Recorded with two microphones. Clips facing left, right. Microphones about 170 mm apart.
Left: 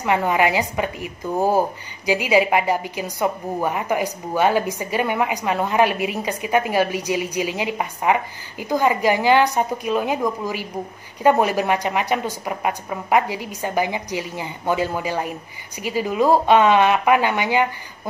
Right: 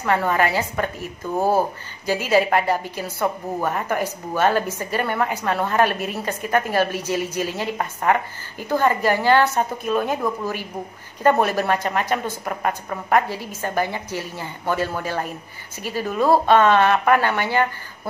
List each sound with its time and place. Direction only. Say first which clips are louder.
0.0 s a woman's voice: left 1 dB; 15° left (ahead or behind)